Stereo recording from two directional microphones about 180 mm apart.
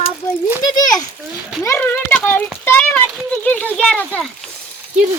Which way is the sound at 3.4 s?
10° left (ahead or behind).